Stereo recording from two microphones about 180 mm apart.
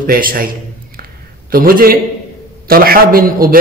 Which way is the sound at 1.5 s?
55° right (ahead or behind).